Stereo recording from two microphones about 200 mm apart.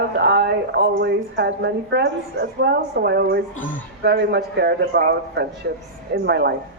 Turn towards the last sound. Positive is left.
turn(degrees=-55)  # may be behind; listen again after turning